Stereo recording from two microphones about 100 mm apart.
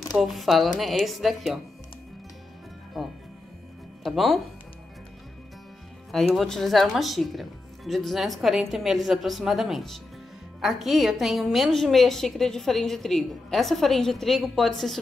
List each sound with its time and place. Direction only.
0.1 s a woman's voice: centre (ahead or behind)
4.0 s speech: centre (ahead or behind)
6.1 s a woman's voice: centre (ahead or behind)